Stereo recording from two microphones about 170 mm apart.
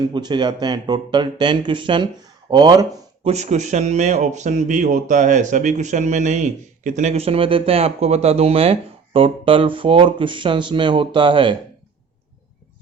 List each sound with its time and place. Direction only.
0.1 s speech: 25° right (ahead or behind)
3.2 s speech: 40° right (ahead or behind)